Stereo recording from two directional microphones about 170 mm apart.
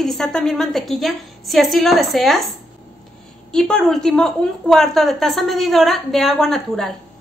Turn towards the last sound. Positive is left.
turn(degrees=0)  # may be behind; listen again after turning